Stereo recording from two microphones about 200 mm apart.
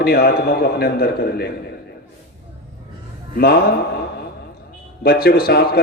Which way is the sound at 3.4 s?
50° left (ahead or behind).